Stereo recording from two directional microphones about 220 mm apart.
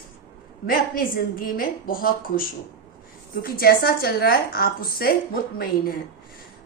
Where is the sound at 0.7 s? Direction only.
40° left (ahead or behind).